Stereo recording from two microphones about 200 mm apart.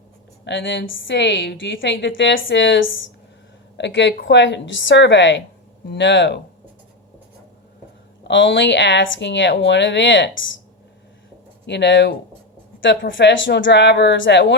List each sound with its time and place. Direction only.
0.4 s a woman's voice: 65° left (ahead or behind)
8.3 s a woman's voice: 60° left (ahead or behind)
11.6 s a woman's voice: 60° left (ahead or behind)